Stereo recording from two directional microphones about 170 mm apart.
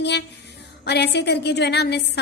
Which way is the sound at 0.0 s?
90° left.